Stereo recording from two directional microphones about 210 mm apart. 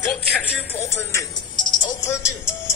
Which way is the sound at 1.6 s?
20° left (ahead or behind).